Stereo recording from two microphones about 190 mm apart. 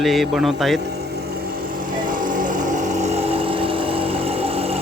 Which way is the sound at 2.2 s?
45° right (ahead or behind).